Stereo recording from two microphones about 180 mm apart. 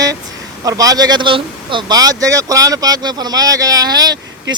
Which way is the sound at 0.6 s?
20° right (ahead or behind).